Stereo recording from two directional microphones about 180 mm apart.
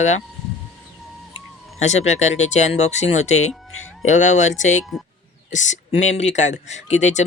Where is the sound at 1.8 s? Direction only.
40° left (ahead or behind).